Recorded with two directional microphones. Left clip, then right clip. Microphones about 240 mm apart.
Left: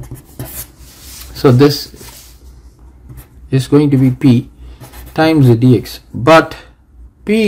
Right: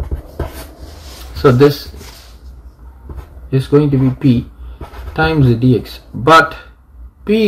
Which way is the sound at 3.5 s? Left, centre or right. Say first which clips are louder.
Left 1 dB; left.